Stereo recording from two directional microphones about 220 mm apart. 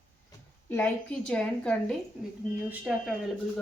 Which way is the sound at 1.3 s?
5° left (ahead or behind).